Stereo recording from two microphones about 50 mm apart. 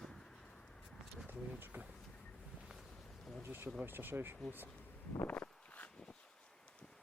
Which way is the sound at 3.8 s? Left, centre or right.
Right.